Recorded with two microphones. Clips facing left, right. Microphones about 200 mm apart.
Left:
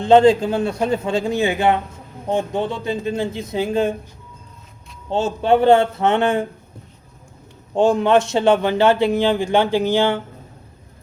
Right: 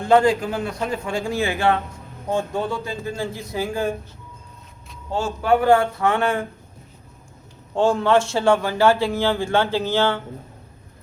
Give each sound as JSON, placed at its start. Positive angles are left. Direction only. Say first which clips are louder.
{"t": 0.0, "sound": "a man's voice", "louder": "left 5 dB", "side_deg": 20}
{"t": 5.1, "sound": "a man's voice", "louder": "left 3 dB", "side_deg": 25}
{"t": 7.8, "sound": "a man's voice", "louder": "left 3 dB", "side_deg": 15}